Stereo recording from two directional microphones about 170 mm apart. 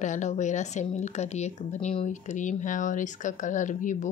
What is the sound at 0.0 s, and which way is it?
Speech, 45° left (ahead or behind).